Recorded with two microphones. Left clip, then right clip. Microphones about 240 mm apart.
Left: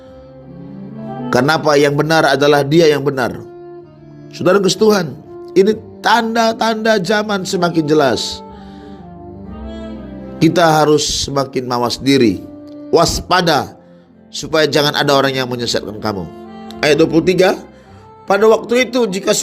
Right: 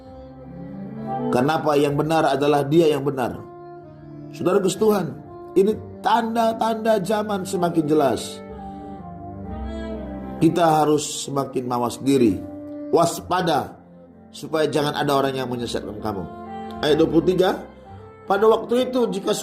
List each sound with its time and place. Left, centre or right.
1.3 s speech: left
10.3 s speech: left